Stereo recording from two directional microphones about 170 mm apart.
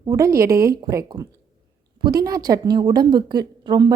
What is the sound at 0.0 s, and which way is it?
A woman's voice, 20° right (ahead or behind).